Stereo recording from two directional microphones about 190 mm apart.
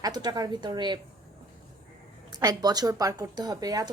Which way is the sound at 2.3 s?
20° right (ahead or behind).